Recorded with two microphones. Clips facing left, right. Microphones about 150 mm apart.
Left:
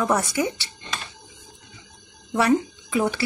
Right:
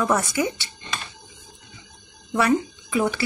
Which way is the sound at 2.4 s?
35° left (ahead or behind).